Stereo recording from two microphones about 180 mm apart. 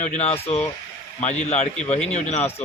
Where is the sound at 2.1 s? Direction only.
40° left (ahead or behind).